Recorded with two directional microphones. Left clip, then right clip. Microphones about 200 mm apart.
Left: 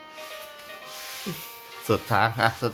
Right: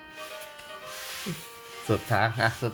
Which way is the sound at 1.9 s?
15° left (ahead or behind).